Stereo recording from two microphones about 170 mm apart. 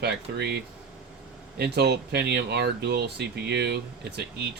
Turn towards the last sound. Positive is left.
turn(degrees=-75)  # may be behind; listen again after turning